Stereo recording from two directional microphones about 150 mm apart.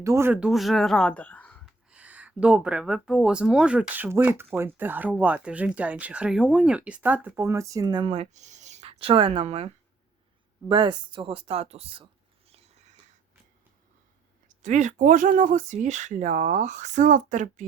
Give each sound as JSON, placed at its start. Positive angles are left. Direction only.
{"t": 0.0, "sound": "speech", "side_deg": -20}
{"t": 1.9, "sound": "speech", "side_deg": -10}
{"t": 10.7, "sound": "speech", "side_deg": -30}
{"t": 12.5, "sound": "a sound", "side_deg": -45}
{"t": 14.4, "sound": "speech", "side_deg": -55}